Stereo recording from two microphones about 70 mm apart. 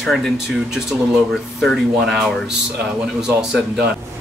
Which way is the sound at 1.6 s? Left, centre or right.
Centre.